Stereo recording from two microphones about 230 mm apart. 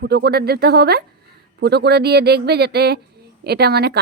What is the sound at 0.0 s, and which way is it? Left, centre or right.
A woman's voice, right.